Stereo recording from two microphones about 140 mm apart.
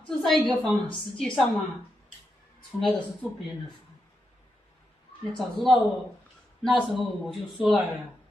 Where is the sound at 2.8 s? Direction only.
5° left (ahead or behind).